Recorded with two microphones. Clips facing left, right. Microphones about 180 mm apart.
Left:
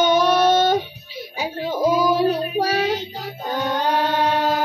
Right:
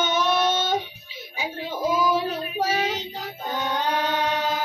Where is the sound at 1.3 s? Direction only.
40° left (ahead or behind).